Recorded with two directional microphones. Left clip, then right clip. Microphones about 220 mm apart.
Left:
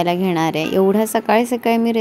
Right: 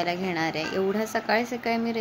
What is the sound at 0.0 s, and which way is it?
A woman's voice, 55° left (ahead or behind).